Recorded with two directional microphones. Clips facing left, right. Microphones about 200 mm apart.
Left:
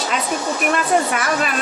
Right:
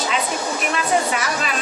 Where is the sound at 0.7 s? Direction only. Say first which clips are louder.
Left 2 dB; 55° left (ahead or behind).